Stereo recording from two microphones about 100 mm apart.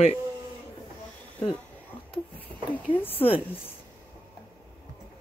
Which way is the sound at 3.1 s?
75° left (ahead or behind).